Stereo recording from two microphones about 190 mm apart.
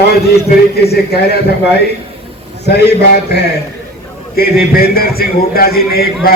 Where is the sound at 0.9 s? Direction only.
55° left (ahead or behind).